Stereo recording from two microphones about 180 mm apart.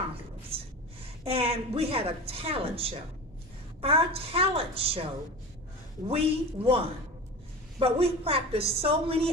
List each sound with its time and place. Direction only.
1.3 s speech: 35° right (ahead or behind)
6.1 s speech: 35° right (ahead or behind)